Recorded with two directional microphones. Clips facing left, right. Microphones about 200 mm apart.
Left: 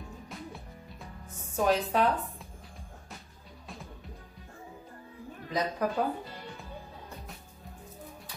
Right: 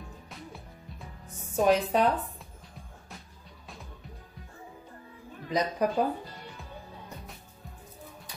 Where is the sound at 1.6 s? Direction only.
20° right (ahead or behind).